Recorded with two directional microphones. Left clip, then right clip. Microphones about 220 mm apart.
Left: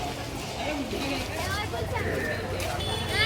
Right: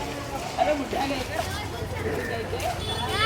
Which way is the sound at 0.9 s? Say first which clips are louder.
Right 4 dB; 25° right (ahead or behind).